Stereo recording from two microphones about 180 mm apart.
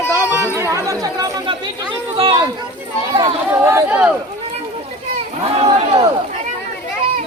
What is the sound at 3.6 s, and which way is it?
Speech, 15° right (ahead or behind).